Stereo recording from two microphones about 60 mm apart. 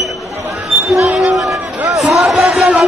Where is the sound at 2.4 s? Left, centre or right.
Centre.